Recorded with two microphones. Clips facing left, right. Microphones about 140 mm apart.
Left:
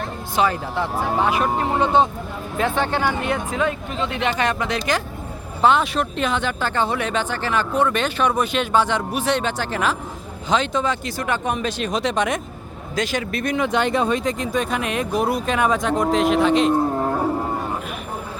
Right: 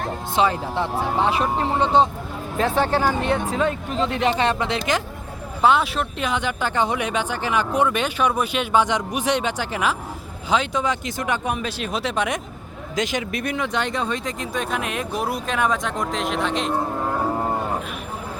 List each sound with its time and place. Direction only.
0.3 s speech: 25° right (ahead or behind)
5.6 s speech: 5° right (ahead or behind)
13.0 s speech: 20° right (ahead or behind)
13.6 s speech: 5° left (ahead or behind)